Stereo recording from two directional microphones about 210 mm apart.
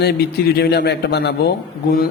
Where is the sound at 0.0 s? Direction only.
50° left (ahead or behind).